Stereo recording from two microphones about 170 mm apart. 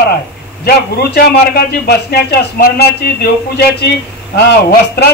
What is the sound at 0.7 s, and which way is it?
A man's voice, 65° left (ahead or behind).